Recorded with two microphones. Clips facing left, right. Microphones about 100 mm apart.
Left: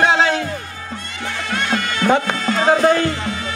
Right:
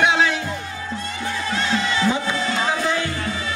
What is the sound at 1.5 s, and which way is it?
Music, 55° left (ahead or behind).